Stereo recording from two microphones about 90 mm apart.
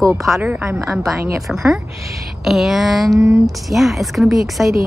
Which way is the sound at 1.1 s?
30° right (ahead or behind).